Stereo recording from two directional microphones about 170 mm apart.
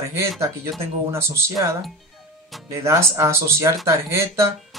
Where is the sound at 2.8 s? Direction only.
15° right (ahead or behind).